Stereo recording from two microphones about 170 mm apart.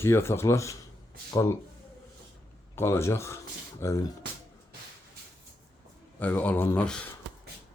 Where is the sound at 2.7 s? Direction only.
15° left (ahead or behind).